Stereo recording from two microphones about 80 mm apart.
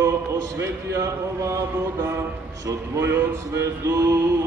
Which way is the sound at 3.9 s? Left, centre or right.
Right.